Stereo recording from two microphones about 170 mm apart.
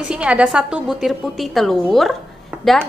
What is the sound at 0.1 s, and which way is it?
A woman's voice, 5° right (ahead or behind).